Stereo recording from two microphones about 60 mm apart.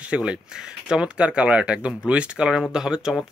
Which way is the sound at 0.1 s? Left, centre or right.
Centre.